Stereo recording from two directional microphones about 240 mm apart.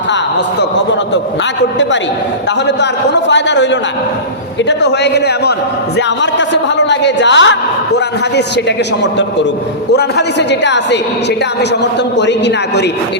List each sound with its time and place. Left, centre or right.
2.6 s speech: left
4.8 s speech: left
9.9 s speech: left
11.8 s speech: left